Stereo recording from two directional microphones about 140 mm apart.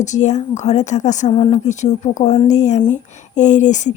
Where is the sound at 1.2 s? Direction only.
35° left (ahead or behind).